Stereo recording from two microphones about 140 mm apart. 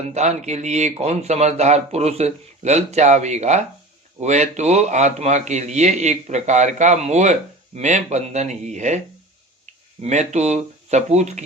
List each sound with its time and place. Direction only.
0.1 s a man's voice: 55° right (ahead or behind)